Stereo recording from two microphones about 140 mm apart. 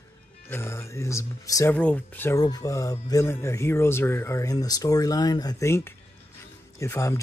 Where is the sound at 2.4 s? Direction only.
25° left (ahead or behind).